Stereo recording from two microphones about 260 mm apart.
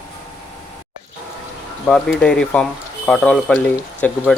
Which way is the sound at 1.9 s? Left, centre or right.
Centre.